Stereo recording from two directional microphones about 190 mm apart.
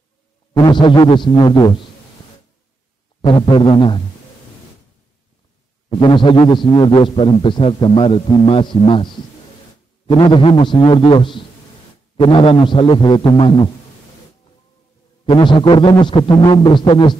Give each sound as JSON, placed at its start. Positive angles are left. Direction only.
{"t": 0.6, "sound": "a man's voice", "side_deg": 25}
{"t": 3.2, "sound": "a man's voice", "side_deg": 25}
{"t": 5.9, "sound": "a man's voice", "side_deg": 25}
{"t": 15.2, "sound": "a man's voice", "side_deg": 25}